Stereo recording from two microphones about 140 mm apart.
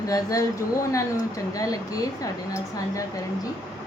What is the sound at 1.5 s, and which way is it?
A woman's voice, 25° left (ahead or behind).